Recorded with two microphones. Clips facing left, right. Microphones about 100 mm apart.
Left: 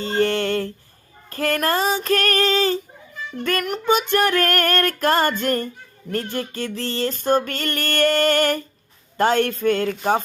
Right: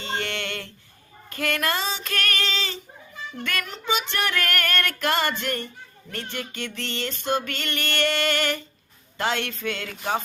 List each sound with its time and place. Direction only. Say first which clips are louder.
0.0 s a sound: left 10 dB; 40° left (ahead or behind)
1.3 s female singing: left 5 dB; 40° left (ahead or behind)
9.1 s speech: left 8 dB; 45° left (ahead or behind)